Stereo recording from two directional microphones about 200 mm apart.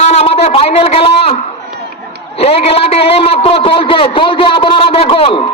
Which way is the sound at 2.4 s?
30° left (ahead or behind).